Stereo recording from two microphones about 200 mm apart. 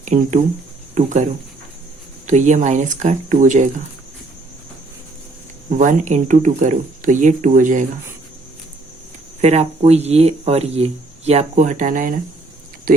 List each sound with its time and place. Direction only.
0.0 s speech: 35° right (ahead or behind)
5.7 s speech: 35° right (ahead or behind)
9.4 s speech: 35° right (ahead or behind)